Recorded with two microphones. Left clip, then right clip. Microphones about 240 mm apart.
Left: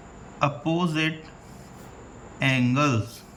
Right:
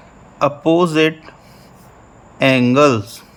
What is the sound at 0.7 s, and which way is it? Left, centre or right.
Speech, right.